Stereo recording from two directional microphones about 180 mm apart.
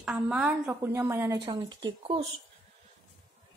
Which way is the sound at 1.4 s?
30° right (ahead or behind).